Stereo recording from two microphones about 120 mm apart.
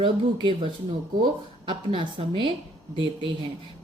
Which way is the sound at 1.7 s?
40° right (ahead or behind).